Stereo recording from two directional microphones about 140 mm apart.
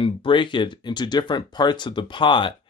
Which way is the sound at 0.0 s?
35° left (ahead or behind).